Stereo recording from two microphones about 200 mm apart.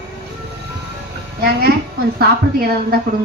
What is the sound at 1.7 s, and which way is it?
A woman's voice, 50° right (ahead or behind).